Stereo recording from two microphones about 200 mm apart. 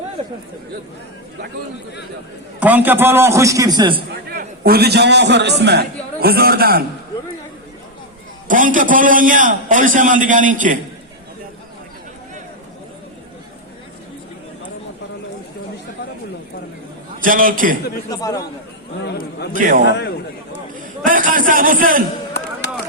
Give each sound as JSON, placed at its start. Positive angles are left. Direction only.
{"t": 2.6, "sound": "a man's voice", "side_deg": -10}
{"t": 4.3, "sound": "a man's voice", "side_deg": -50}
{"t": 8.4, "sound": "a man's voice", "side_deg": -40}
{"t": 17.2, "sound": "a man's voice", "side_deg": -45}
{"t": 18.1, "sound": "speech", "side_deg": 20}
{"t": 19.0, "sound": "a man's voice", "side_deg": 55}
{"t": 19.5, "sound": "a man's voice", "side_deg": -40}
{"t": 22.6, "sound": "a sound", "side_deg": 60}